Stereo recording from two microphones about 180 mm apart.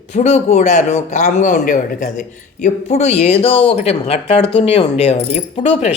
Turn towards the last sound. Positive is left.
turn(degrees=35)  # may be behind; listen again after turning